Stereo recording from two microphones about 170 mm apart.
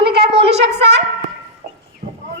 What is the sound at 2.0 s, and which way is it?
Clip-clop, 35° right (ahead or behind).